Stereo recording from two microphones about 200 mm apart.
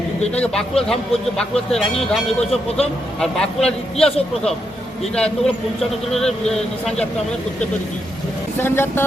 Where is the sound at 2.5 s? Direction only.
30° left (ahead or behind).